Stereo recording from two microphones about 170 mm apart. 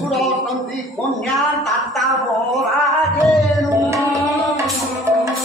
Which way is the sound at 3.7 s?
20° right (ahead or behind).